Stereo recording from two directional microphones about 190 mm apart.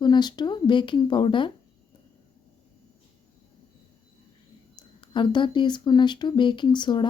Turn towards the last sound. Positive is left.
turn(degrees=25)  # may be behind; listen again after turning